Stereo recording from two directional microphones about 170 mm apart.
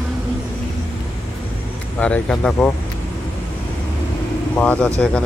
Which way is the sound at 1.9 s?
10° left (ahead or behind).